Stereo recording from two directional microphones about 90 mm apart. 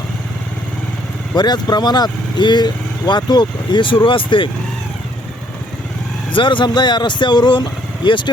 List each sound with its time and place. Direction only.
1.4 s speech: 50° left (ahead or behind); by 4.4 s 70° left (ahead or behind)
6.3 s speech: 65° left (ahead or behind)